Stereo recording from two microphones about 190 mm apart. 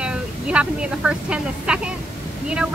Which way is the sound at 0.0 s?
5° right (ahead or behind).